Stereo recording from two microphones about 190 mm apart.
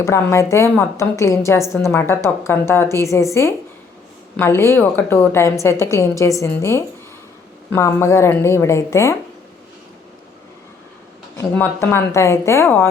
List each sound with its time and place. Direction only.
0.0 s a woman's voice: 15° left (ahead or behind)
4.4 s a woman's voice: 10° left (ahead or behind)
11.5 s a woman's voice: 10° left (ahead or behind)